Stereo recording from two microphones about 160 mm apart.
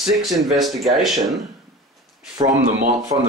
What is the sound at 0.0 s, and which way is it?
Speech, centre (ahead or behind).